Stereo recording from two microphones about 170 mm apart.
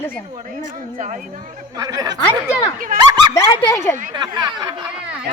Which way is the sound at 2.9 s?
55° right (ahead or behind).